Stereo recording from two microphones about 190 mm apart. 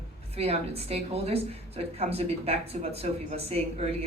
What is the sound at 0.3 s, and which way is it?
A woman's voice, 30° right (ahead or behind).